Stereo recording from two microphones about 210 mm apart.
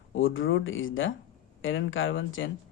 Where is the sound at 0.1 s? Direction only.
70° left (ahead or behind).